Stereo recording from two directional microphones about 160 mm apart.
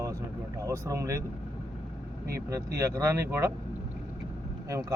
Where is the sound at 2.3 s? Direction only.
20° right (ahead or behind).